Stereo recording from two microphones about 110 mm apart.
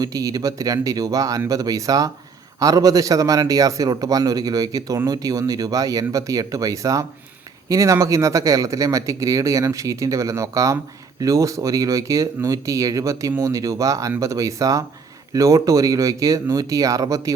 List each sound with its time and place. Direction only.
0.0 s a man's voice: 35° right (ahead or behind)